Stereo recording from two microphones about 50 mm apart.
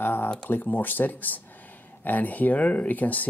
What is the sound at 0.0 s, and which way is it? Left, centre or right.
Speech, left.